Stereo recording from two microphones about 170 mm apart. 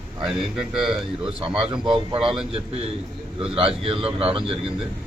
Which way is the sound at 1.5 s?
30° right (ahead or behind).